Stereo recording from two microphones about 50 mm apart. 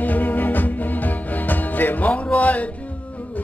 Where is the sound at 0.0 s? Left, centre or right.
Left.